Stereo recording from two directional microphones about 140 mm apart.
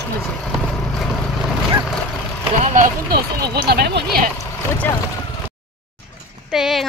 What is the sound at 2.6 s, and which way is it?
Speech, 65° right (ahead or behind).